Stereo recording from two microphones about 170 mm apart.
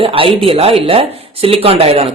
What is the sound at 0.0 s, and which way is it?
Speech, 35° right (ahead or behind).